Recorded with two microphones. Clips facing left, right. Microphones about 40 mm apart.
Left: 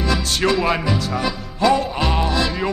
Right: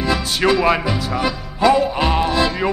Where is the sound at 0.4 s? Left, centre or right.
Centre.